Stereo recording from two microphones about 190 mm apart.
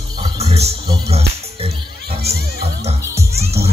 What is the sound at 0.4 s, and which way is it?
Music, 35° right (ahead or behind).